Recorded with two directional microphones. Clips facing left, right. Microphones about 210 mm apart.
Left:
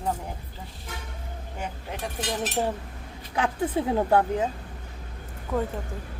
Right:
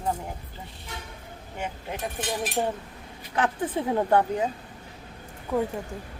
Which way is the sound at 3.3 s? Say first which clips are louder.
Left 1 dB; 10° left (ahead or behind).